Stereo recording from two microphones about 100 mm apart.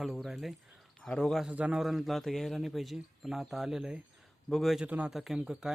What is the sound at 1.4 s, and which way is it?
Speech, 10° right (ahead or behind).